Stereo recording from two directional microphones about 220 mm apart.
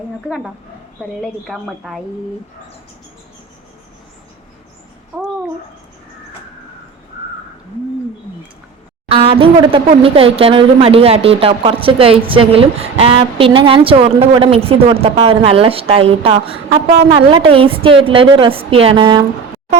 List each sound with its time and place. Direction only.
0.3 s speech: centre (ahead or behind)
5.1 s babbling: 5° right (ahead or behind)
9.0 s speech: 25° right (ahead or behind)